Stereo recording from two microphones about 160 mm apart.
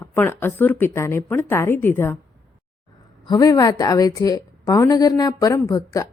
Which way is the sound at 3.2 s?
25° left (ahead or behind).